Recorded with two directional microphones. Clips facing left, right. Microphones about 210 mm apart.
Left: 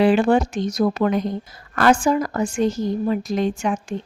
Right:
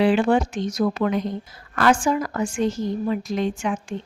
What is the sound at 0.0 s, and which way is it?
A woman's voice, 45° left (ahead or behind).